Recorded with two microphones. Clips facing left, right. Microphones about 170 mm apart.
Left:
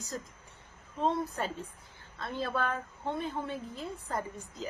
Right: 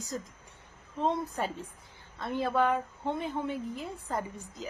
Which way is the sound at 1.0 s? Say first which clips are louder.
Right 1 dB; 15° right (ahead or behind).